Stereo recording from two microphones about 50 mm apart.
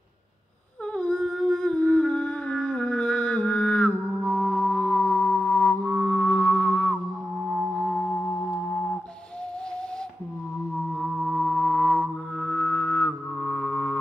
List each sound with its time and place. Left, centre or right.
0.9 s a sound: centre; by 4.0 s left
4.2 s music: centre
5.0 s a sound: left
5.9 s music: left
6.3 s music: centre
7.3 s music: centre
10.8 s music: centre; by 13.9 s left